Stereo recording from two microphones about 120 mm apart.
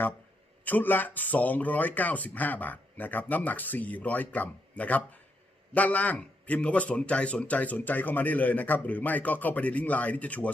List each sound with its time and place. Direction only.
0.6 s speech: 15° left (ahead or behind)